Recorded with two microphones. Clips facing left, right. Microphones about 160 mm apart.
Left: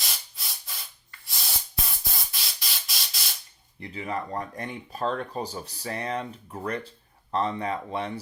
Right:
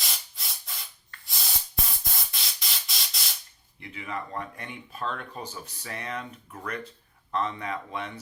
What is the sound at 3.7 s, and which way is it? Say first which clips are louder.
Speech: left 4 dB; 35° left (ahead or behind).